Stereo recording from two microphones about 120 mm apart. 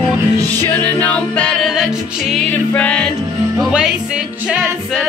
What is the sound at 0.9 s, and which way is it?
Music, 10° left (ahead or behind).